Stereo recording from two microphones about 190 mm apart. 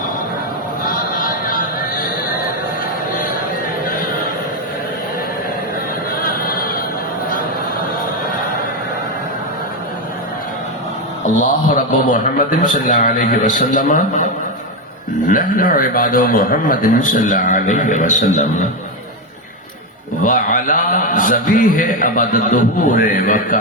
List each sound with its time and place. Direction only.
0.9 s a sound: 50° left (ahead or behind)
6.2 s music: 50° left (ahead or behind)
11.3 s a man's voice: 40° left (ahead or behind)
15.3 s a man's voice: 45° left (ahead or behind)
20.2 s a man's voice: 45° left (ahead or behind)